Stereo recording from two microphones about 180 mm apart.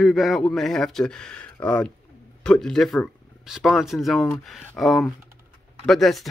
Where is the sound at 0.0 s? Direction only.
Centre (ahead or behind).